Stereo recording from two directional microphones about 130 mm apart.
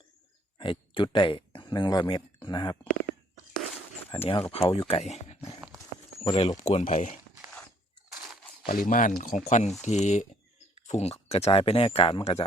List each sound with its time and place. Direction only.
0.6 s speech: 40° left (ahead or behind)
2.8 s a sound: 90° left
4.1 s speech: 40° left (ahead or behind)
4.5 s speech: 50° left (ahead or behind)
5.5 s horse: 5° right (ahead or behind)
6.2 s speech: 40° left (ahead or behind)
6.6 s speech: 55° left (ahead or behind)
8.7 s speech: 90° left; by 12.5 s 50° left (ahead or behind)